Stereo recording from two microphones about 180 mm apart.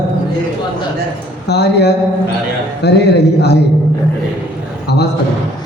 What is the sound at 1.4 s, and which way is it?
Speech, 65° left (ahead or behind).